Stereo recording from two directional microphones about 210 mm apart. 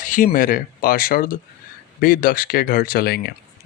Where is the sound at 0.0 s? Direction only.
40° left (ahead or behind).